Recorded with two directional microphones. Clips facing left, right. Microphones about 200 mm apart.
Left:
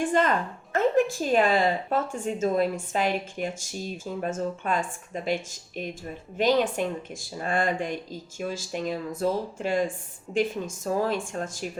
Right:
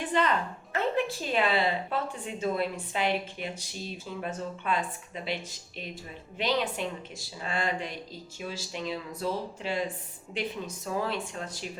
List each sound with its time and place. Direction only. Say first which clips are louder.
0.0 s a woman's voice: left 4 dB; 45° left (ahead or behind)